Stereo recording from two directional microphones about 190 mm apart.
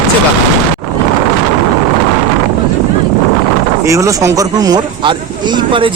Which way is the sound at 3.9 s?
15° right (ahead or behind).